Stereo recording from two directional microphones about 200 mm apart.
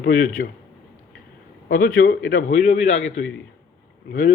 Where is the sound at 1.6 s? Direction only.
45° left (ahead or behind).